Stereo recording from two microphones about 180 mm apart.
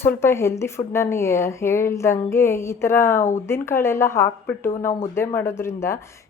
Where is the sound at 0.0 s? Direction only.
15° left (ahead or behind).